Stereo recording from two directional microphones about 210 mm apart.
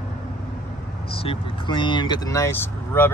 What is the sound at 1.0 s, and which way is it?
Speech, 25° left (ahead or behind).